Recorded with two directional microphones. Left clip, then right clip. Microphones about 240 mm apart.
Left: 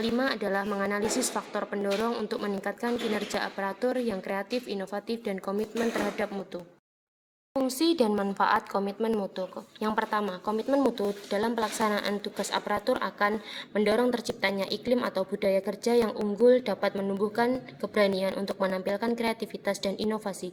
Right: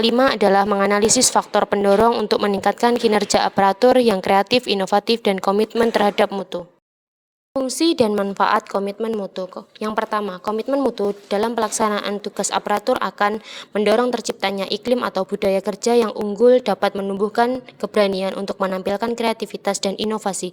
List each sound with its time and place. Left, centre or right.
0.0 s a woman's voice: right
7.5 s a woman's voice: right